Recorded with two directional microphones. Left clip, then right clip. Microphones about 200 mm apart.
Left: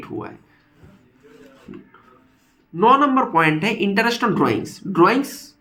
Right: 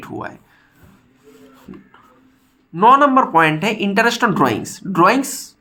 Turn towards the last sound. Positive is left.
turn(degrees=-40)  # may be behind; listen again after turning